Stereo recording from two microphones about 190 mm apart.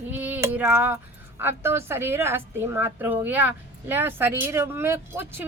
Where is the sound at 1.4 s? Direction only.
10° right (ahead or behind).